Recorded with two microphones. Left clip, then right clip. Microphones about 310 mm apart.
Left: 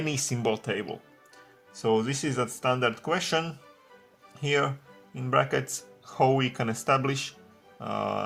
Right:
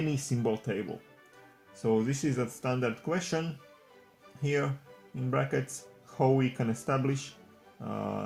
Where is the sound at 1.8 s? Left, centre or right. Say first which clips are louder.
Left 3 dB; left.